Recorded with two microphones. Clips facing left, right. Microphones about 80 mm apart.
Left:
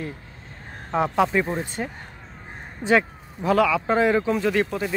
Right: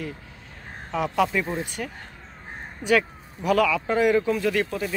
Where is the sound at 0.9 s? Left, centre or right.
Left.